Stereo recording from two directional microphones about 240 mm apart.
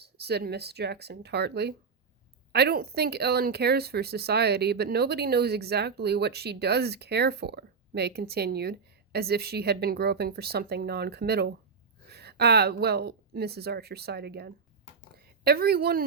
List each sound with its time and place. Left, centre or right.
0.0 s a woman's voice: right